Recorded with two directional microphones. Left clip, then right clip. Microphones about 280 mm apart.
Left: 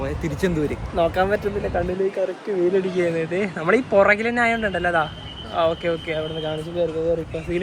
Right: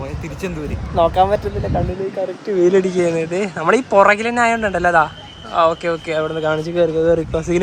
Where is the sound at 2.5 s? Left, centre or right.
Right.